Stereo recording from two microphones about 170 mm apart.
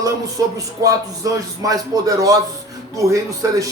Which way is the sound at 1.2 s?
20° right (ahead or behind).